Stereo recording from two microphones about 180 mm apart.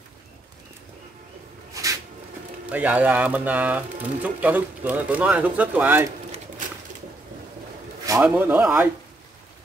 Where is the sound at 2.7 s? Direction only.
10° right (ahead or behind).